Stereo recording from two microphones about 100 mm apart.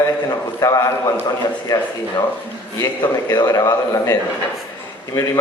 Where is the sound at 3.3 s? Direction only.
35° left (ahead or behind).